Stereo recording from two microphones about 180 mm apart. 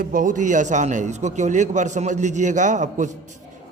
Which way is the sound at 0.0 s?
50° right (ahead or behind).